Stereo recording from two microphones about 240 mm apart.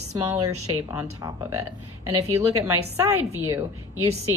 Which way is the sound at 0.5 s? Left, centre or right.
Right.